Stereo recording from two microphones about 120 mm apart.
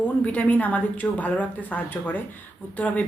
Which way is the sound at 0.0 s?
10° left (ahead or behind).